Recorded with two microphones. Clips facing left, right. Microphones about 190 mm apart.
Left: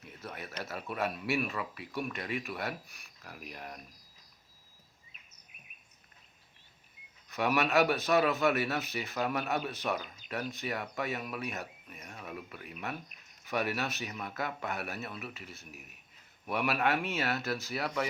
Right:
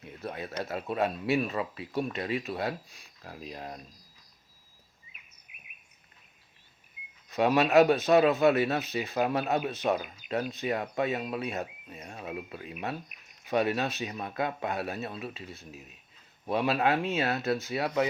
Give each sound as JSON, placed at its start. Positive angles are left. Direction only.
{"t": 0.0, "sound": "speech", "side_deg": -25}
{"t": 5.1, "sound": "bird vocalization", "side_deg": -10}
{"t": 7.3, "sound": "speech", "side_deg": -25}